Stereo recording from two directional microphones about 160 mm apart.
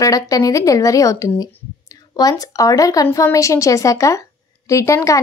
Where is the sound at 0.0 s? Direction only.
20° left (ahead or behind).